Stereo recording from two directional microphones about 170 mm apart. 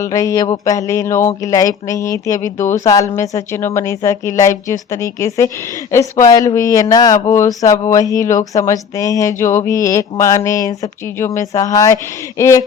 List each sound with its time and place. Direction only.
0.0 s speech: 20° left (ahead or behind)